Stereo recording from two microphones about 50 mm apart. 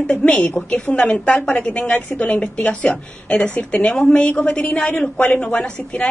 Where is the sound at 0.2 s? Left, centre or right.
Left.